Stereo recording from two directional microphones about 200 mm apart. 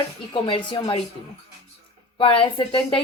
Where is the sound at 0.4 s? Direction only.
25° left (ahead or behind).